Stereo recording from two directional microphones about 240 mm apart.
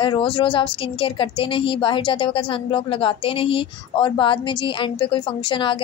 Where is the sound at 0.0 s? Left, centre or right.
Left.